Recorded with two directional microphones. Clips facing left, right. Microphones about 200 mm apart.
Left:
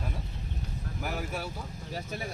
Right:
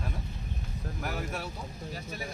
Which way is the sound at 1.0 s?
5° left (ahead or behind).